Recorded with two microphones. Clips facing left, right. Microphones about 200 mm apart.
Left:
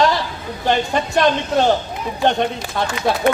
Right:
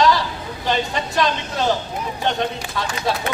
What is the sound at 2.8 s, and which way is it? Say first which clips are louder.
Speech: left 5 dB; 55° left (ahead or behind).